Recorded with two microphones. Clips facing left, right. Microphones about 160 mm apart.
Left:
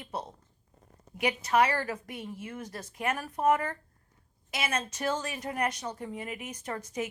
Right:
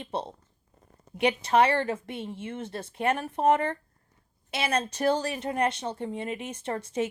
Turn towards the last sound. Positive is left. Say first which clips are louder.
# right 5 dB
turn(degrees=-30)  # may be behind; listen again after turning